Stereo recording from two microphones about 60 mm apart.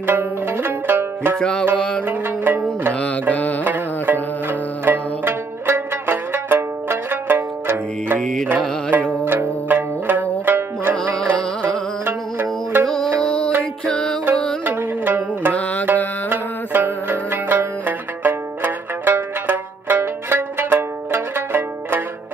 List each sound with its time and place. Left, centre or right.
0.0 s zither: right
1.4 s music: centre
2.0 s zither: right
2.9 s music: left
3.6 s music: right
8.2 s music: centre
9.2 s music: right
11.0 s music: centre
12.0 s music: right
12.8 s music: centre
14.6 s music: right
15.5 s music: left
16.3 s music: right